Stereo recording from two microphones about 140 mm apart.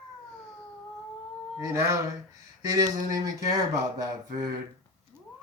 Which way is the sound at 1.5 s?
20° right (ahead or behind).